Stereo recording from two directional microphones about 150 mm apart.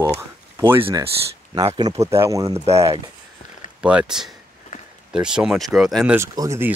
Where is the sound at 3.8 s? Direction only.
5° right (ahead or behind).